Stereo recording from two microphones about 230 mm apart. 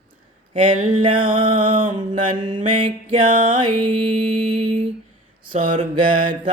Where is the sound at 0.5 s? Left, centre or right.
Right.